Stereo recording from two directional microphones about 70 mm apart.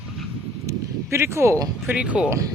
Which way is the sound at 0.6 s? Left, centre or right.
Right.